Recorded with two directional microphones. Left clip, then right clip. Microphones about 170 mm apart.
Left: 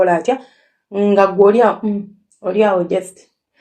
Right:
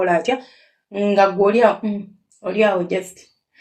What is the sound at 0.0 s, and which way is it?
Speech, 30° left (ahead or behind).